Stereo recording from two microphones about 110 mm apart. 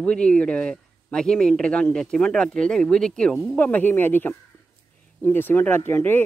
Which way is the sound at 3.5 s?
15° left (ahead or behind).